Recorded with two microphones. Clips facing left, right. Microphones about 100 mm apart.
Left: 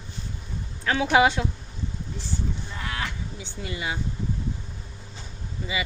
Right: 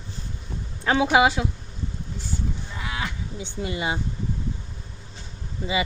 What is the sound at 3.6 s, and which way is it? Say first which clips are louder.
Speech: right 4 dB; 25° right (ahead or behind).